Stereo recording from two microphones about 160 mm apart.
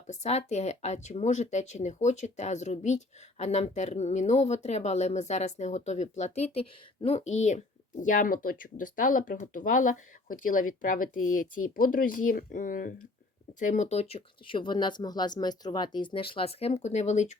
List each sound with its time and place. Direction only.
0.1 s speech: 45° left (ahead or behind)
8.0 s speech: 55° left (ahead or behind)